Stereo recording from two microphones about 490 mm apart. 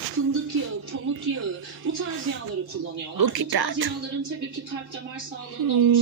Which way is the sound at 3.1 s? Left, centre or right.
Right.